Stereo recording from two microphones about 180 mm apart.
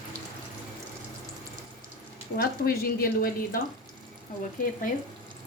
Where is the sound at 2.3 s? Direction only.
55° left (ahead or behind).